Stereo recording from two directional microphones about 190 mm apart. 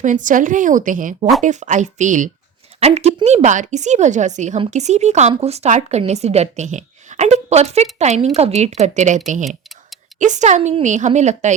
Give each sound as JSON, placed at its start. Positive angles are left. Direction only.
{"t": 0.0, "sound": "a woman's voice", "side_deg": -40}